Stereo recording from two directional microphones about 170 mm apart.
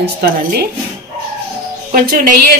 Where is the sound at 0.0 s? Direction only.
70° right (ahead or behind).